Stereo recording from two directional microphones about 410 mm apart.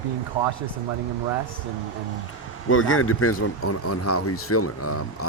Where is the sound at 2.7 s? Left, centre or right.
Left.